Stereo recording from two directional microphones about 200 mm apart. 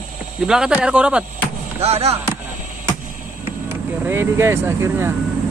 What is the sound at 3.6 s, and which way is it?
Speech, 10° right (ahead or behind).